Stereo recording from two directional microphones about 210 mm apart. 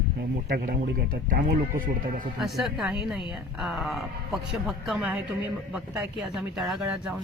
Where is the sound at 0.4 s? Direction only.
40° right (ahead or behind).